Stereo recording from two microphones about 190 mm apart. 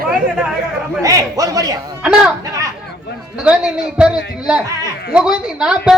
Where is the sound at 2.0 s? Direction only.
5° right (ahead or behind).